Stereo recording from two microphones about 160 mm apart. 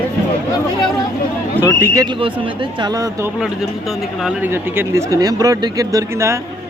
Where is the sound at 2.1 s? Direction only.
35° right (ahead or behind).